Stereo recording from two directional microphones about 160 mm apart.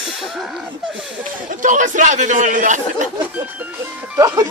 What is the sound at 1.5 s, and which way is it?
A man's voice, 55° right (ahead or behind).